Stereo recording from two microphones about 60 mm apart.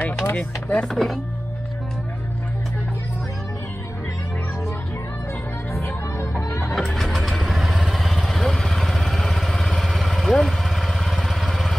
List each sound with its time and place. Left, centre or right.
0.0 s chopping: left
0.4 s speech: left
0.8 s speech: centre
7.0 s vehicle: centre